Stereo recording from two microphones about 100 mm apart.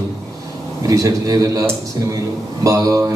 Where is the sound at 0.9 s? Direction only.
35° right (ahead or behind).